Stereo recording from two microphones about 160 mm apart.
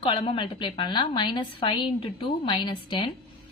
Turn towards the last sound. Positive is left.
turn(degrees=35)  # may be behind; listen again after turning